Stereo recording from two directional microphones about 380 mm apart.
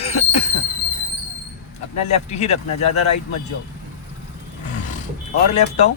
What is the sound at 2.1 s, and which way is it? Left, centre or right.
Speech, centre.